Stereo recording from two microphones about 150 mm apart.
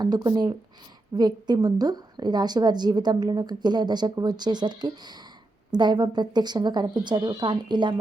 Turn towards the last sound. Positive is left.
turn(degrees=-30)  # may be behind; listen again after turning